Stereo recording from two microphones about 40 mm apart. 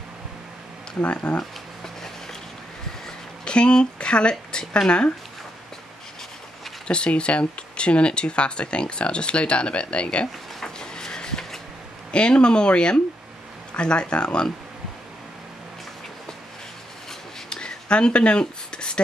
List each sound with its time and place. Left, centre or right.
1.0 s speech: left
3.4 s speech: left
6.9 s speech: left
10.6 s vehicle: centre
12.1 s speech: left
17.5 s a sound: left